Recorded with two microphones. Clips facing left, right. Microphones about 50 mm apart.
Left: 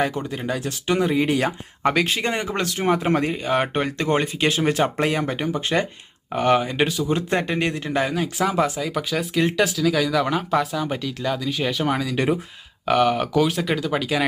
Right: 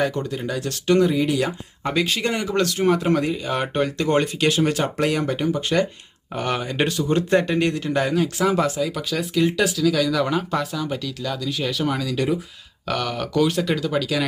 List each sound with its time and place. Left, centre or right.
0.1 s speech: centre
0.6 s speech: centre
1.0 s speech: left
2.0 s speech: centre
2.3 s speech: left
6.6 s speech: centre
7.3 s speech: left
8.8 s speech: centre
9.8 s speech: centre
10.8 s speech: centre
12.1 s speech: left
12.8 s speech: left
13.4 s speech: centre